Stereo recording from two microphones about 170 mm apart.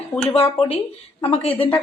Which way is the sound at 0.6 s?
30° left (ahead or behind).